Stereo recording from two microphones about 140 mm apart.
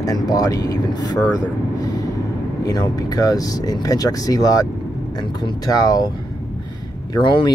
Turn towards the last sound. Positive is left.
turn(degrees=30)  # may be behind; listen again after turning